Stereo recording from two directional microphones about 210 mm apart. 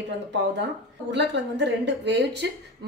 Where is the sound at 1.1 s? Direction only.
55° right (ahead or behind).